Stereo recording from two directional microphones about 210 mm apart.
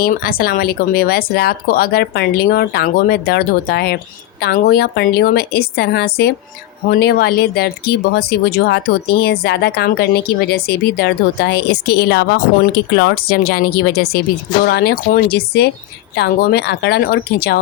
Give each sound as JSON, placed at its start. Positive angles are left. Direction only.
{"t": 0.0, "sound": "speech", "side_deg": 45}